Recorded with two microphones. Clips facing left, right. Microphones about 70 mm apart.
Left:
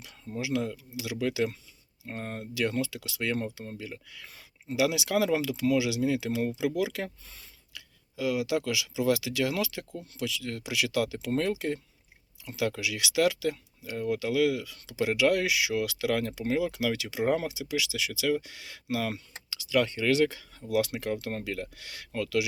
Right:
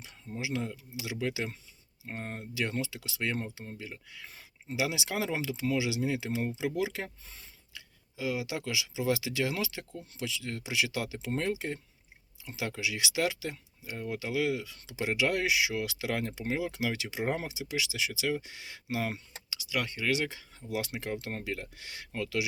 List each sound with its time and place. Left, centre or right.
0.3 s speech: right
19.5 s speech: centre
20.7 s speech: right